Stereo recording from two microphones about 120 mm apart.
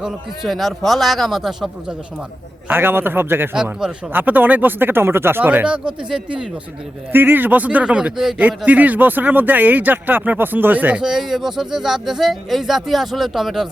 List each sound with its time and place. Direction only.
0.0 s a man's voice: centre (ahead or behind)
2.6 s speech: 20° right (ahead or behind)
3.5 s a man's voice: 5° right (ahead or behind)
4.1 s speech: 15° right (ahead or behind)
7.1 s speech: 15° right (ahead or behind)